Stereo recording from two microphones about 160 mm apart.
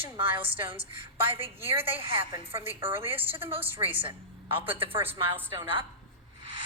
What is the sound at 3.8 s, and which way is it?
Speech, 35° right (ahead or behind).